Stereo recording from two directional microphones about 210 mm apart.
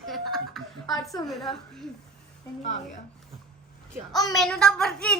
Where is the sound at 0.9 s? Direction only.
20° left (ahead or behind).